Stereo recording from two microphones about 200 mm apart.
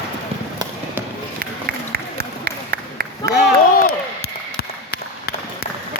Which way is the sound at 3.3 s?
55° left (ahead or behind).